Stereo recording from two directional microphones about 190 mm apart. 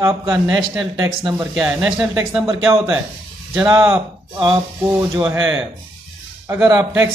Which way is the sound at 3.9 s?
25° right (ahead or behind).